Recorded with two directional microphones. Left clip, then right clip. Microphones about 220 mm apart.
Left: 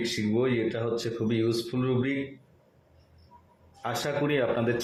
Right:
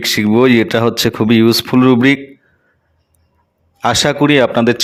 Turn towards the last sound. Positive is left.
turn(degrees=-50)  # may be behind; listen again after turning